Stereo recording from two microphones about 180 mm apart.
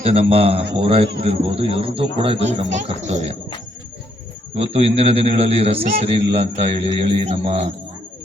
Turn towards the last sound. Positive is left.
turn(degrees=-35)  # may be behind; listen again after turning